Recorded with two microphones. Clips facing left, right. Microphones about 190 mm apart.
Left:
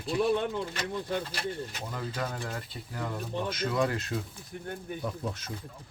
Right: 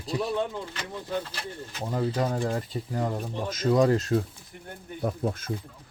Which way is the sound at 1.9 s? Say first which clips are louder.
Right 9 dB; 30° right (ahead or behind).